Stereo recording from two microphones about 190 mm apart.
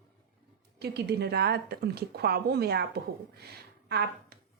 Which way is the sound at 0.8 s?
60° right (ahead or behind).